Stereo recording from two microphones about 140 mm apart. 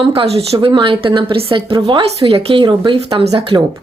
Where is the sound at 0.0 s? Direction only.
40° right (ahead or behind).